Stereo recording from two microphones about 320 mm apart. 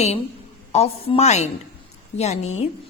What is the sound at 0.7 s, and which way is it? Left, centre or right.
A woman's voice, centre.